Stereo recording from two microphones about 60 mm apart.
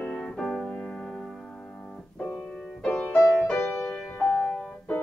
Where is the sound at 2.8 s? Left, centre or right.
Centre.